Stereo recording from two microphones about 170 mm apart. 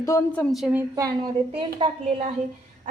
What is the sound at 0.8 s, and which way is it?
Speech, 20° right (ahead or behind).